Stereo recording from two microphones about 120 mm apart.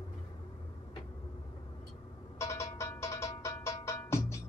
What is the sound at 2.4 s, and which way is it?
Music, 25° left (ahead or behind).